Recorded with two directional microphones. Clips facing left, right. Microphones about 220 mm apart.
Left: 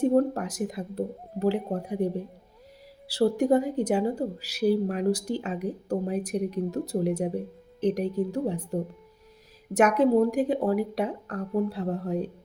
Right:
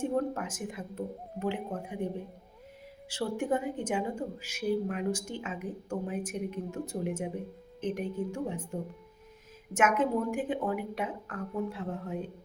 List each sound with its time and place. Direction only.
0.0 s a woman's voice: 35° left (ahead or behind)